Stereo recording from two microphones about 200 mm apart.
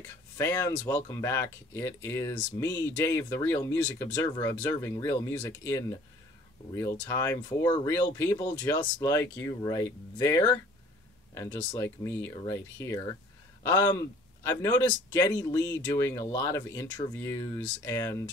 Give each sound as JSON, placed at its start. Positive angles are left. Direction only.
{"t": 0.4, "sound": "speech", "side_deg": 15}